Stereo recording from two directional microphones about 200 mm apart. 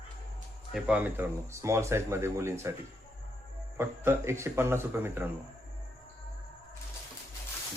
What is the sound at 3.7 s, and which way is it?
Speech, 10° right (ahead or behind).